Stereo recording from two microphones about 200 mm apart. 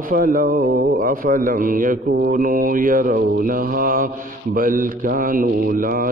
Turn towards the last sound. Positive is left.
turn(degrees=-45)  # may be behind; listen again after turning